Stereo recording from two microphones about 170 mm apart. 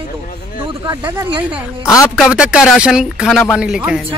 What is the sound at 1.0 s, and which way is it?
Speech, 10° right (ahead or behind).